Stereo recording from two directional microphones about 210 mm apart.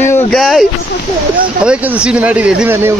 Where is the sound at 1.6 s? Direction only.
5° right (ahead or behind).